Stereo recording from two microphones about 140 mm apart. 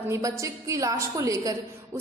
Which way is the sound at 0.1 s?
25° right (ahead or behind).